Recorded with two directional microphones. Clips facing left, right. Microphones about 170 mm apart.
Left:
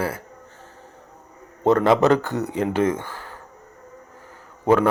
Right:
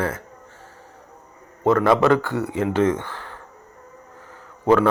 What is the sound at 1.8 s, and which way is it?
Speech, 20° left (ahead or behind).